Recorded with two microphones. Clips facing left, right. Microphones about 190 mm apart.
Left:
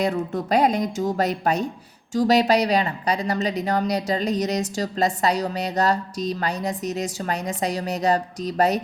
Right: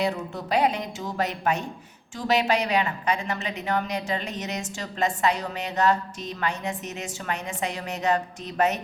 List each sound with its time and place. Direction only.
0.0 s a woman's voice: 45° left (ahead or behind)